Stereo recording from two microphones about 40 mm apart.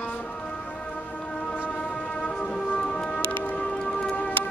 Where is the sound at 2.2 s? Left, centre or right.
Left.